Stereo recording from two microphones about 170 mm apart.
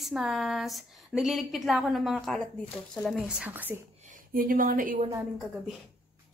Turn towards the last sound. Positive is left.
turn(degrees=-55)  # may be behind; listen again after turning